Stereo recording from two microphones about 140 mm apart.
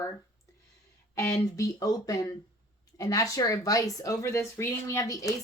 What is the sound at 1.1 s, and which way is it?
Speech, 20° left (ahead or behind).